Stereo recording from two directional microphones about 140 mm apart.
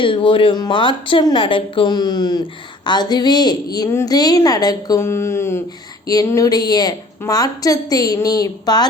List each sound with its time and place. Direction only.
0.0 s a woman's voice: 40° left (ahead or behind)